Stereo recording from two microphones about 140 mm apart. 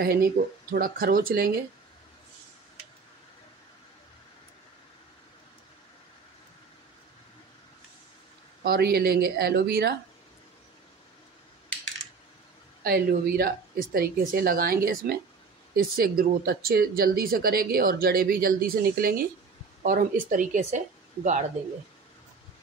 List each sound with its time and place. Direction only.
0.0 s speech: 90° right
8.6 s speech: 90° right
12.8 s speech: 90° right
19.8 s speech: 70° right (ahead or behind)